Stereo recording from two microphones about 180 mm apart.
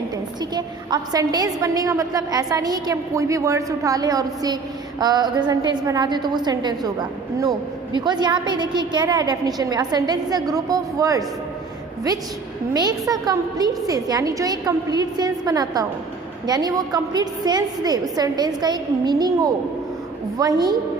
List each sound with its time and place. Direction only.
0.5 s a woman's voice: 20° right (ahead or behind)
12.7 s a woman's voice: 20° right (ahead or behind)